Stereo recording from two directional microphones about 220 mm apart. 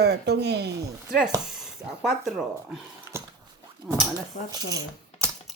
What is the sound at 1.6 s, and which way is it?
Speech, centre (ahead or behind).